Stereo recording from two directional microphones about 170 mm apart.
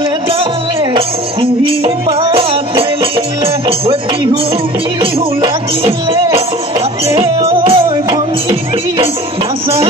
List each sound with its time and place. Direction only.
0.9 s music: 35° right (ahead or behind)
7.1 s music: 35° right (ahead or behind)